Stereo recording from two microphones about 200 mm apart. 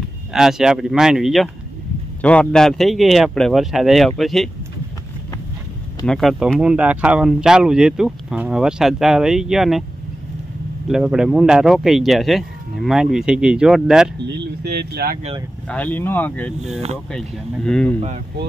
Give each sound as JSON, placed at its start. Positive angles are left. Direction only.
{"t": 0.3, "sound": "speech", "side_deg": 0}
{"t": 6.0, "sound": "speech", "side_deg": 0}
{"t": 10.9, "sound": "speech", "side_deg": -5}
{"t": 14.3, "sound": "speech", "side_deg": -55}
{"t": 15.7, "sound": "speech", "side_deg": 10}